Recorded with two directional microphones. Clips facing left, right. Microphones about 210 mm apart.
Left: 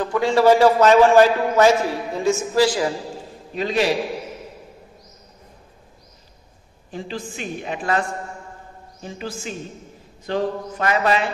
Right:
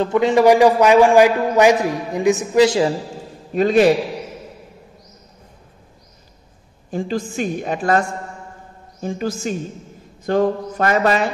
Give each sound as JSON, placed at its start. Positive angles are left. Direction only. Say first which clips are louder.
{"t": 0.0, "sound": "a man's voice", "louder": "right 3 dB", "side_deg": -20}
{"t": 3.5, "sound": "a woman's voice", "louder": "right 8 dB", "side_deg": -50}
{"t": 6.9, "sound": "a woman's voice", "louder": "right 7 dB", "side_deg": -45}